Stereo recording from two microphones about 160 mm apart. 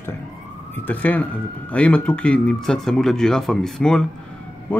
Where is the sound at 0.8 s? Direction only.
10° left (ahead or behind).